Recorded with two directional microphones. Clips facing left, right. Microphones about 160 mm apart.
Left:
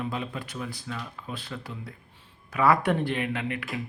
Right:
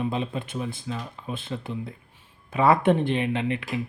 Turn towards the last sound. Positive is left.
turn(degrees=-25)  # may be behind; listen again after turning